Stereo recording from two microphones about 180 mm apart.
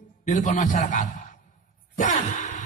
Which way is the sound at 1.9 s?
45° left (ahead or behind).